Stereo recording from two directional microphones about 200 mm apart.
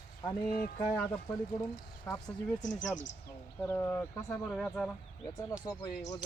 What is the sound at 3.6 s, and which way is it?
Speech, 10° left (ahead or behind).